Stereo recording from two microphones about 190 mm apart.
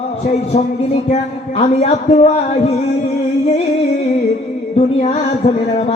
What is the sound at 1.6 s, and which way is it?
Speech, 35° left (ahead or behind).